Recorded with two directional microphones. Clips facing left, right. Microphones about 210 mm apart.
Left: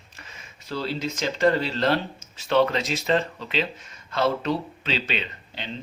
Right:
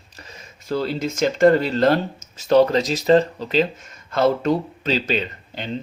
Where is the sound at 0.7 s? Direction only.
45° right (ahead or behind).